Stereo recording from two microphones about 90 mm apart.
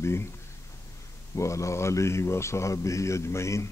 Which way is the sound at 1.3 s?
35° left (ahead or behind).